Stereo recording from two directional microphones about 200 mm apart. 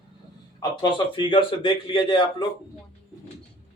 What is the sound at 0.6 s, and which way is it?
A man's voice, 20° left (ahead or behind).